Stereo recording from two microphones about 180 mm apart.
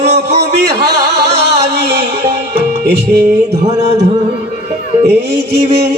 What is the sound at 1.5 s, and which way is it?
Music, 65° right (ahead or behind).